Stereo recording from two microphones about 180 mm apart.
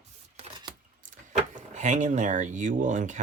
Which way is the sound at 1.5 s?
40° right (ahead or behind).